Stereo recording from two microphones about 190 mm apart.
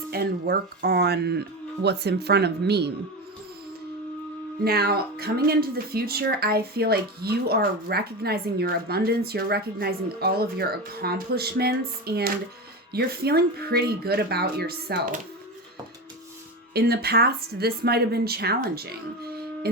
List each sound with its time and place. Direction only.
0.1 s speech: 55° right (ahead or behind)
4.6 s speech: 55° right (ahead or behind)
16.7 s speech: 55° right (ahead or behind)
19.6 s music: 55° right (ahead or behind)